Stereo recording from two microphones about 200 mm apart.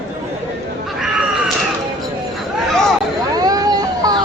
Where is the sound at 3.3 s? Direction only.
20° right (ahead or behind).